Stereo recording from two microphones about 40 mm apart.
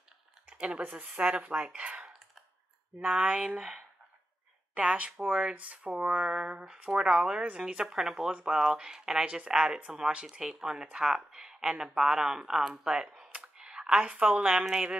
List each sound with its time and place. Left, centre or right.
0.5 s speech: right
3.1 s speech: right
4.7 s speech: right
5.5 s speech: right; by 8.0 s centre
8.0 s speech: centre
9.2 s speech: right
9.5 s speech: centre